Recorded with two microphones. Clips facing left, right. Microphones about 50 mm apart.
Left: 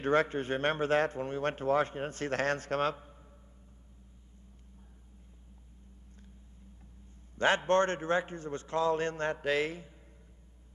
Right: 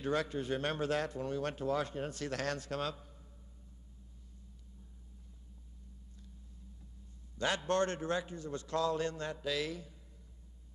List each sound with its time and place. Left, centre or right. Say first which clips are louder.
0.0 s speech: left 6 dB; left
7.3 s speech: left 6 dB; left